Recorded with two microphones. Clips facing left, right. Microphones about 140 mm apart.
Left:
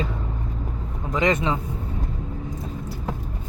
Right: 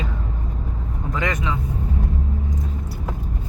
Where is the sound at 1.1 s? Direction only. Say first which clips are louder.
Left 4 dB; 20° left (ahead or behind).